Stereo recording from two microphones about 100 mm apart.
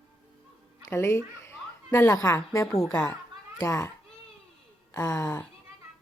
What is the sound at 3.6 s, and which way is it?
Speech, 35° left (ahead or behind).